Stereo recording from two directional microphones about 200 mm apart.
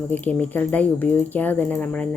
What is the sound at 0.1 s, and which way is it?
A woman's voice, 10° left (ahead or behind).